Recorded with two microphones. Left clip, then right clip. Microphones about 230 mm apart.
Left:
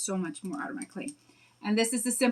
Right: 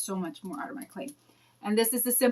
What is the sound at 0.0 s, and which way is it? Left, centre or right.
Speech, centre.